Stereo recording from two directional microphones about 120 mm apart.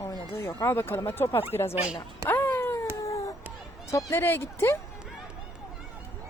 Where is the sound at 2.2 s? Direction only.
15° left (ahead or behind).